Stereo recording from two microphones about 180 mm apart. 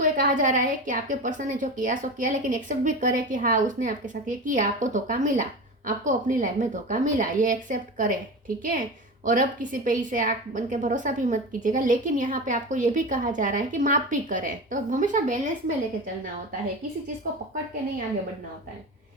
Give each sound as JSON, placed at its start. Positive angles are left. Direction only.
{"t": 0.0, "sound": "a woman's voice", "side_deg": -45}